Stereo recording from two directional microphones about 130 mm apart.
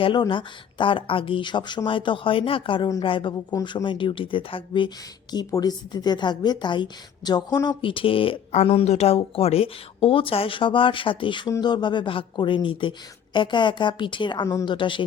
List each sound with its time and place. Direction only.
0.0 s a woman's voice: 40° left (ahead or behind)
5.3 s a woman's voice: 30° left (ahead or behind)